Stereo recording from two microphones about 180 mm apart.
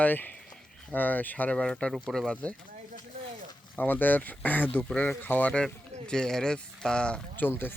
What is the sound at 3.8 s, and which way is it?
Speech, 10° left (ahead or behind).